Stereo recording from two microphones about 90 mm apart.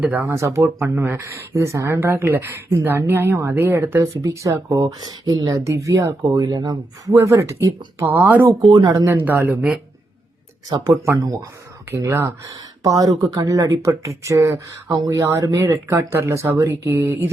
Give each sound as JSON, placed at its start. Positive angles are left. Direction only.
{"t": 0.0, "sound": "speech", "side_deg": -20}
{"t": 4.7, "sound": "speech", "side_deg": -45}
{"t": 7.1, "sound": "speech", "side_deg": -35}
{"t": 7.9, "sound": "speech", "side_deg": -25}
{"t": 10.7, "sound": "speech", "side_deg": -40}
{"t": 16.6, "sound": "speech", "side_deg": -20}